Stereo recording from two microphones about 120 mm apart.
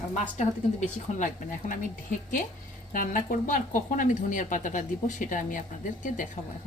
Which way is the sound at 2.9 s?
90° left.